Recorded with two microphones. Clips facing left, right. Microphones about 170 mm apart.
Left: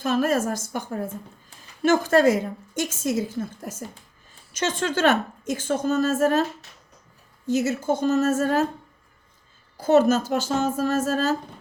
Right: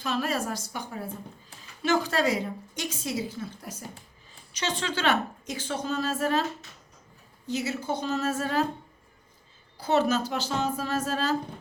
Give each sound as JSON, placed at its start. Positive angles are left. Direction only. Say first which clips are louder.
{"t": 0.0, "sound": "a woman's voice", "louder": "left 7 dB", "side_deg": 50}
{"t": 7.4, "sound": "a woman's voice", "louder": "left 7 dB", "side_deg": 45}
{"t": 9.7, "sound": "a woman's voice", "louder": "left 6 dB", "side_deg": 45}